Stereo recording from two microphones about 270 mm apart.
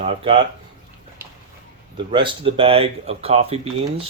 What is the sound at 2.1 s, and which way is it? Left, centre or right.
Speech, centre.